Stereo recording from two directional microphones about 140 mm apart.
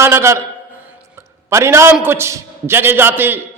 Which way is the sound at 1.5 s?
20° right (ahead or behind).